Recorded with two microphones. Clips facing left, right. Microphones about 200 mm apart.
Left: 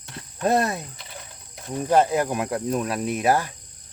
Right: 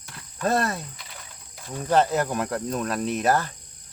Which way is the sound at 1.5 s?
15° left (ahead or behind).